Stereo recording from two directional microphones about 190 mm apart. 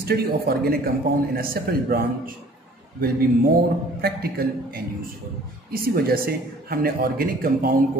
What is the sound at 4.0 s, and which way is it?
A man's voice, 55° right (ahead or behind).